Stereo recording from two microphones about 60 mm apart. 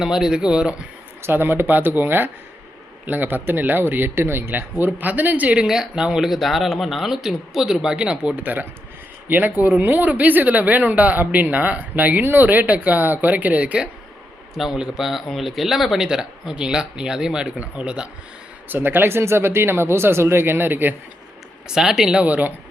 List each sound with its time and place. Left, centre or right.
0.0 s speech: centre
1.2 s speech: right
5.6 s speech: centre
14.5 s speech: centre
18.7 s speech: right
21.7 s speech: centre
22.2 s speech: right